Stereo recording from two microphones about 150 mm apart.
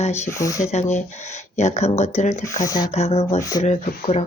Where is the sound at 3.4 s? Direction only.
25° left (ahead or behind).